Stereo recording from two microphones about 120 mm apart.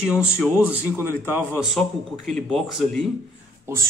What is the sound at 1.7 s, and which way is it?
Speech, 5° left (ahead or behind).